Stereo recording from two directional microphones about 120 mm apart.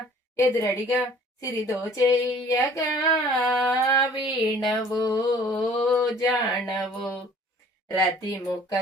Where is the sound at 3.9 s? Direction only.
35° left (ahead or behind).